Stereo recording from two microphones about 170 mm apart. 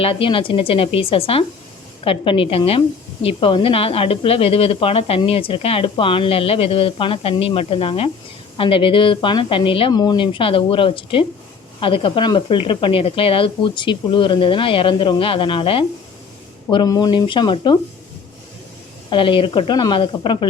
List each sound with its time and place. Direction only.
0.0 s a woman's voice: 30° left (ahead or behind)
19.1 s speech: 30° left (ahead or behind)